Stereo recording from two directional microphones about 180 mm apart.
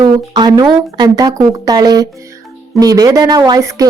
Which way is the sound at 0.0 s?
20° right (ahead or behind).